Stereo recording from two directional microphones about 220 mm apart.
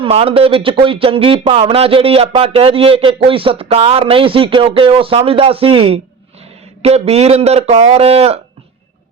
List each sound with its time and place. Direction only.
0.0 s speech: 25° right (ahead or behind)